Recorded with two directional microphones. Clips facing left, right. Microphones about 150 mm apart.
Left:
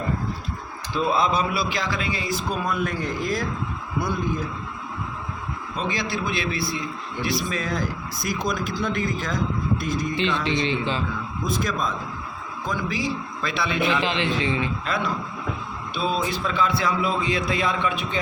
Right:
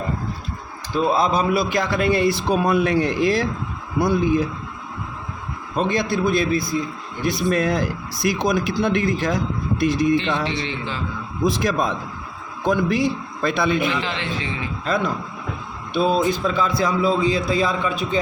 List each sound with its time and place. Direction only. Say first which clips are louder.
0.9 s a man's voice: right 3 dB; 40° right (ahead or behind)
1.7 s a man's voice: right 8 dB; 55° right (ahead or behind); by 4.4 s 80° right
5.7 s a man's voice: right 7 dB; 50° right (ahead or behind); by 10.2 s 70° right (ahead or behind)
10.5 s a man's voice: left 3 dB; 20° left (ahead or behind)
11.4 s a man's voice: right 6 dB; 75° right (ahead or behind); by 13.7 s 50° right (ahead or behind)
14.0 s a man's voice: left 3 dB; 20° left (ahead or behind)
14.8 s a man's voice: right 4 dB; 45° right (ahead or behind)